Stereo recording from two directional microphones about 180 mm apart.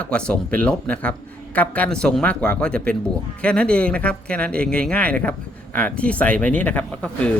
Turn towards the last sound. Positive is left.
turn(degrees=10)  # may be behind; listen again after turning